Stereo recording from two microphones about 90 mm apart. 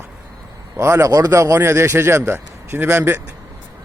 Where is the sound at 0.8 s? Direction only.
30° right (ahead or behind).